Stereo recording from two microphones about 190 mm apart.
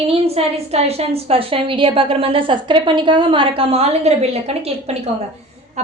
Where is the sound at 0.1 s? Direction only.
30° right (ahead or behind).